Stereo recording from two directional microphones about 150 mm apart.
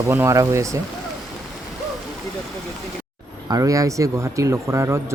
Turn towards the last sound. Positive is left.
turn(degrees=-20)  # may be behind; listen again after turning